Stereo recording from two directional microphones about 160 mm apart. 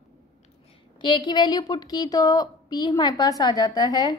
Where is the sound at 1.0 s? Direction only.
30° left (ahead or behind).